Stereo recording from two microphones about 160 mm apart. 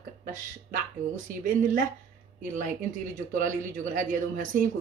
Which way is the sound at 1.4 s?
55° right (ahead or behind).